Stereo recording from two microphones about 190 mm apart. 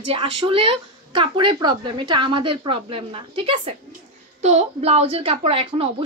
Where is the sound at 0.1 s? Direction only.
30° right (ahead or behind).